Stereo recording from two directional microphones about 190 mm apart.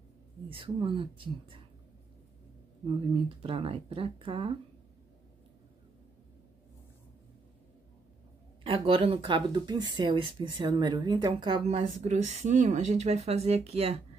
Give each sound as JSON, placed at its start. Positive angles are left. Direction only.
{"t": 0.5, "sound": "speech", "side_deg": -30}
{"t": 3.4, "sound": "speech", "side_deg": -30}
{"t": 8.6, "sound": "speech", "side_deg": -30}